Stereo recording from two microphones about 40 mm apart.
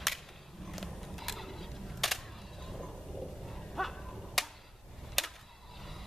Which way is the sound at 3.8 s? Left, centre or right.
Centre.